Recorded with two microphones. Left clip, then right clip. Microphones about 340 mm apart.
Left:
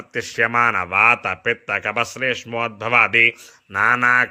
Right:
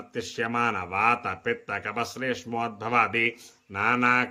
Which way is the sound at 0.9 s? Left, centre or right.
Centre.